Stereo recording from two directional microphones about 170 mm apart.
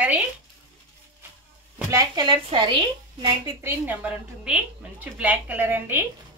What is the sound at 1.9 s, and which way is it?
A woman's voice, 25° right (ahead or behind).